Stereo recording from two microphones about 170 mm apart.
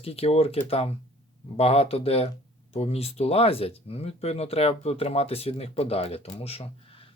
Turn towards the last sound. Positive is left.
turn(degrees=35)  # may be behind; listen again after turning